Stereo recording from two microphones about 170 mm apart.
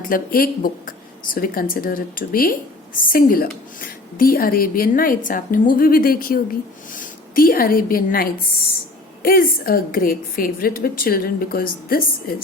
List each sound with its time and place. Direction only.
0.1 s a woman's voice: 60° left (ahead or behind)